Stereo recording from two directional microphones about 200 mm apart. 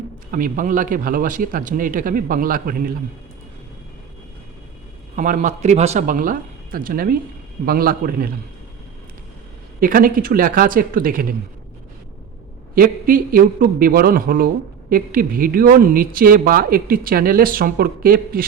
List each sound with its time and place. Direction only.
0.3 s a man's voice: 45° right (ahead or behind)
5.1 s a man's voice: 40° right (ahead or behind)
9.8 s a man's voice: 45° right (ahead or behind)
12.7 s a man's voice: 45° right (ahead or behind)